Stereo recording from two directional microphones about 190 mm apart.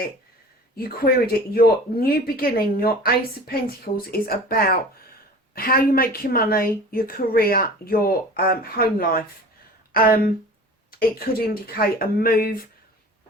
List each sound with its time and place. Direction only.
0.8 s a woman's voice: 50° left (ahead or behind)